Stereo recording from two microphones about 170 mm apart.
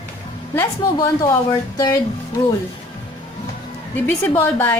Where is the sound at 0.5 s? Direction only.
15° left (ahead or behind).